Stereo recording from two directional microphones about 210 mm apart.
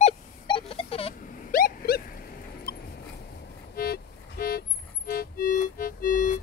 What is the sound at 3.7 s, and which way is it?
Music, 45° left (ahead or behind).